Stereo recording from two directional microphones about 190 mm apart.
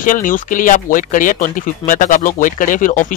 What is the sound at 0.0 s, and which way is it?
Speech, 45° left (ahead or behind).